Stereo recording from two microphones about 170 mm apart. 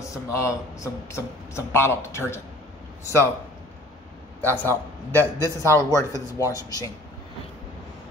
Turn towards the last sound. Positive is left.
turn(degrees=20)  # may be behind; listen again after turning